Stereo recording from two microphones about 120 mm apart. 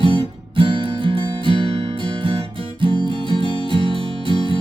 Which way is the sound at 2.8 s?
45° right (ahead or behind).